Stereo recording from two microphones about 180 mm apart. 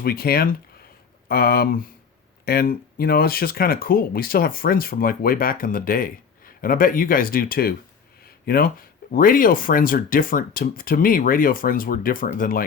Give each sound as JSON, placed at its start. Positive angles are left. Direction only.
{"t": 0.0, "sound": "speech", "side_deg": 55}